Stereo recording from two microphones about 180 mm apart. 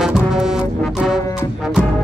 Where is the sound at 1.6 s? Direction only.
5° right (ahead or behind).